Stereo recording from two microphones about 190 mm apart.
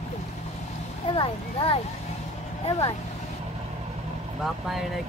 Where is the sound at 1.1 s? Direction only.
30° left (ahead or behind).